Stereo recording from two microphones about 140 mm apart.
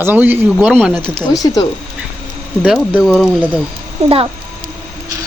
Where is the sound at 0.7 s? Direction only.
5° left (ahead or behind).